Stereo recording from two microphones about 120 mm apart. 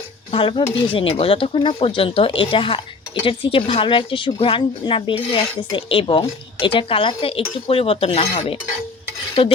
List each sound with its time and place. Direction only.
0.3 s speech: 45° left (ahead or behind)